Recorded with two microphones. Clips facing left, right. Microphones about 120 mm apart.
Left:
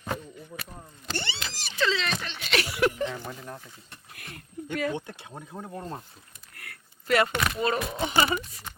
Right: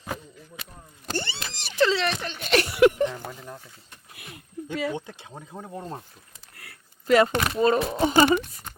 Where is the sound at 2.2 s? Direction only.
45° right (ahead or behind).